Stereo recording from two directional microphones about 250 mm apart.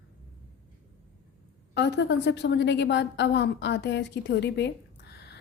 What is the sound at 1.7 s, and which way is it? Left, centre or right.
A woman's voice, left.